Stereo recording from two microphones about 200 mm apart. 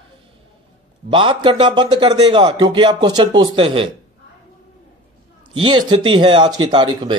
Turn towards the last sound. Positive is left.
turn(degrees=-25)  # may be behind; listen again after turning